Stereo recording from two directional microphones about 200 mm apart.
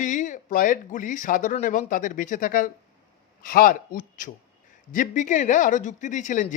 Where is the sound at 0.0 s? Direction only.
40° left (ahead or behind).